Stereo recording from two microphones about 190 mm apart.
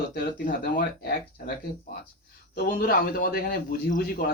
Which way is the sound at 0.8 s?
60° left (ahead or behind).